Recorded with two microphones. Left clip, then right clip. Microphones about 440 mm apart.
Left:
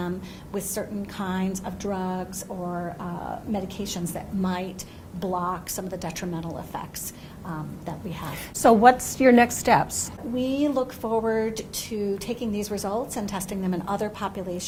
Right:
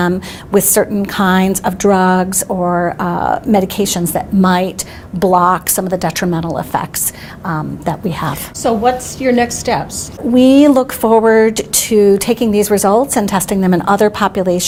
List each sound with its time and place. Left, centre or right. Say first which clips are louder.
0.5 s a woman's voice: right 19 dB; right
8.6 s a woman's voice: right 3 dB; left
10.3 s speech: right 17 dB; right